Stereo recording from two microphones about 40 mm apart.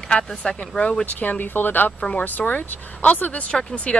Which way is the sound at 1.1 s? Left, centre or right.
Left.